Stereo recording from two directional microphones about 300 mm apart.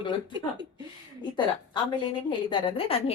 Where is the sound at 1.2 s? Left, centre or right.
Centre.